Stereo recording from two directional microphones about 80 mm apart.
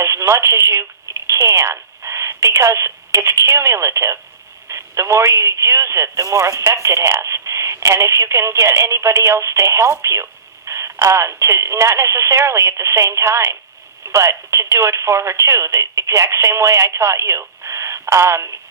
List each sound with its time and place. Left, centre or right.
0.0 s speech: right